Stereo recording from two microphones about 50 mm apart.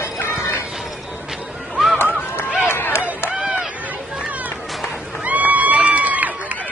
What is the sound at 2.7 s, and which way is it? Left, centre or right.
Run, left.